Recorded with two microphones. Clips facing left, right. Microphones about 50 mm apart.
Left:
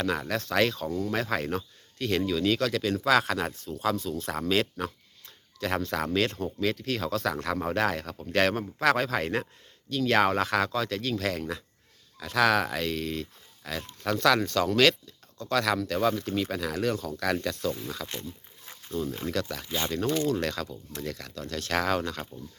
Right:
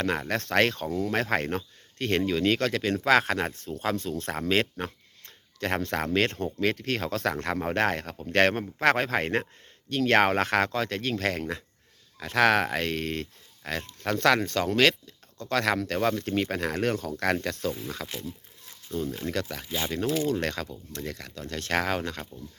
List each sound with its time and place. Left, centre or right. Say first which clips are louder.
0.0 s speech: right 1 dB; right
0.9 s speech: right 1 dB; right
1.1 s speech: right 3 dB; right
5.2 s a sound: right 1 dB; right
6.1 s speech: right 3 dB; right
9.9 s speech: right 2 dB; right
17.4 s speech: even; right
17.7 s speech: even; centre
18.6 s a sound: right 1 dB; left
19.0 s speech: even; centre
19.5 s speech: even; centre
20.4 s speech: even; right